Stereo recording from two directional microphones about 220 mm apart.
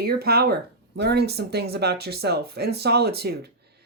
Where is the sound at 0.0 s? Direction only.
45° right (ahead or behind).